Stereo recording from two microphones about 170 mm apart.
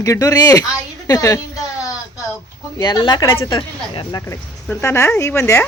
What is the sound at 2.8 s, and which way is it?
Speech, 25° left (ahead or behind).